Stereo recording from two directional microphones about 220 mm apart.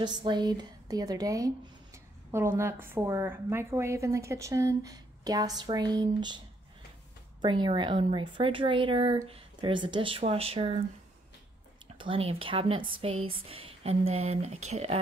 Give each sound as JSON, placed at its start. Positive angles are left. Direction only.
{"t": 0.0, "sound": "a woman's voice", "side_deg": -20}
{"t": 7.4, "sound": "speech", "side_deg": -20}
{"t": 11.9, "sound": "speech", "side_deg": -25}